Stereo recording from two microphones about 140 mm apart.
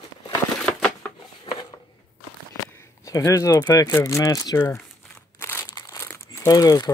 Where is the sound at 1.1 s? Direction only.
35° left (ahead or behind).